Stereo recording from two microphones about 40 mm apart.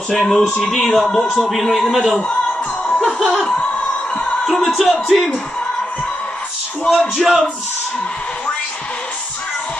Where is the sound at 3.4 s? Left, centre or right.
Left.